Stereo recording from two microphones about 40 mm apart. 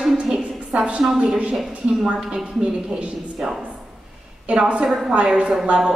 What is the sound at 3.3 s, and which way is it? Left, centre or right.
Speech, centre.